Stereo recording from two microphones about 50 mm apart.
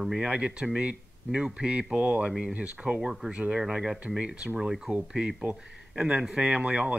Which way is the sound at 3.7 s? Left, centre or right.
Centre.